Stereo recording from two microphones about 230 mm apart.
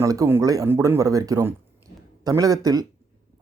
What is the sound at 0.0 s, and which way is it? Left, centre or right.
Speech, centre.